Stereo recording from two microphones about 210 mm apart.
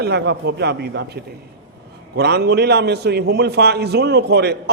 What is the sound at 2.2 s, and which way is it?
A man's voice, 50° right (ahead or behind).